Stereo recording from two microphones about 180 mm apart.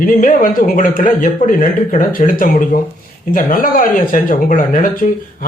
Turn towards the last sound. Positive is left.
turn(degrees=50)  # may be behind; listen again after turning